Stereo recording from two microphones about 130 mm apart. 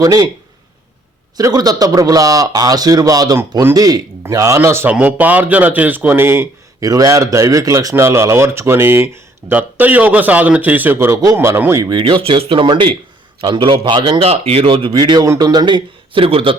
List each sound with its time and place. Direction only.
0.0 s a man's voice: 30° right (ahead or behind)
1.4 s a man's voice: 25° right (ahead or behind)
11.9 s a man's voice: 40° right (ahead or behind)
14.9 s speech: 35° right (ahead or behind)